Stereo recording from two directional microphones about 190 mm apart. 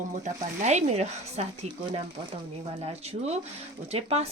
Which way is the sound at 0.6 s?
35° right (ahead or behind).